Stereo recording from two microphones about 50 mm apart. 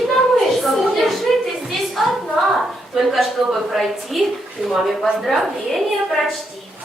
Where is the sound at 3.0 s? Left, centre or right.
Centre.